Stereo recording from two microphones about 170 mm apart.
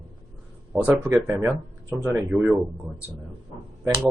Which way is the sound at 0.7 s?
10° right (ahead or behind).